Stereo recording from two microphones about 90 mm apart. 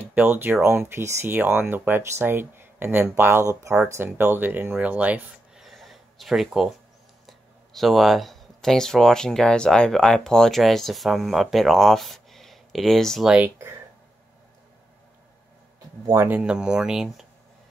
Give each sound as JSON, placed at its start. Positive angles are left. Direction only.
{"t": 0.0, "sound": "speech", "side_deg": -20}
{"t": 5.6, "sound": "a sound", "side_deg": 0}
{"t": 7.2, "sound": "speech", "side_deg": 0}
{"t": 16.3, "sound": "speech", "side_deg": -10}